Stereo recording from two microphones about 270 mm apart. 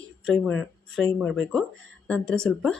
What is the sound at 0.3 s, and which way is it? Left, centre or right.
Speech, centre.